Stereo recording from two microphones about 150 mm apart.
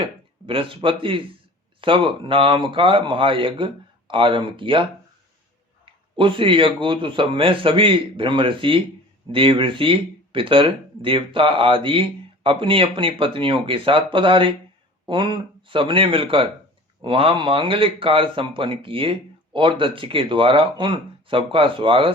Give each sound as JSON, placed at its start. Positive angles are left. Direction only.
{"t": 0.0, "sound": "speech", "side_deg": -35}